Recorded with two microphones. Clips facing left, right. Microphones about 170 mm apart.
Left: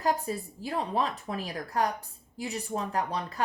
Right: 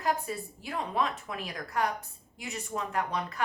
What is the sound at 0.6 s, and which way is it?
A woman's voice, 35° left (ahead or behind).